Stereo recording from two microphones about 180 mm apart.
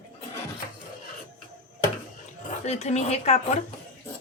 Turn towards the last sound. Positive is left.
turn(degrees=35)  # may be behind; listen again after turning